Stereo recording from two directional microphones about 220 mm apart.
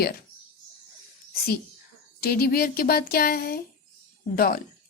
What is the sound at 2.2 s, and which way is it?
Speech, 45° left (ahead or behind).